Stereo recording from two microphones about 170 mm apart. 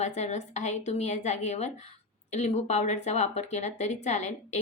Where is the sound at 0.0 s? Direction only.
45° left (ahead or behind).